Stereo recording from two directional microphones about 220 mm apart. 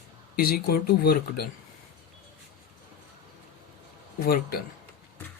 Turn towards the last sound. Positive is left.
turn(degrees=45)  # may be behind; listen again after turning